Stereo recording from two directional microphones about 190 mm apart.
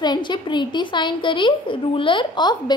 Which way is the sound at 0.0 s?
25° left (ahead or behind).